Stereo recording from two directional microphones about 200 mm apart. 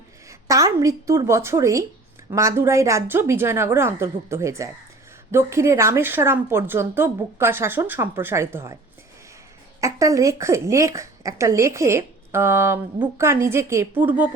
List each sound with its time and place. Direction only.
0.3 s speech: 15° right (ahead or behind)
9.8 s speech: 15° right (ahead or behind)